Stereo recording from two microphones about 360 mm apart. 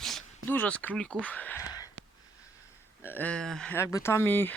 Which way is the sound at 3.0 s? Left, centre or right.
Centre.